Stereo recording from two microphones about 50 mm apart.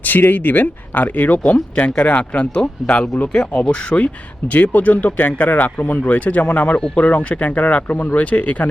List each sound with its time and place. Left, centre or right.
0.0 s speech: left
1.5 s speech: left